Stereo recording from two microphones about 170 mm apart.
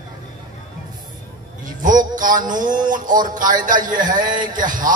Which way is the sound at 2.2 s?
50° right (ahead or behind).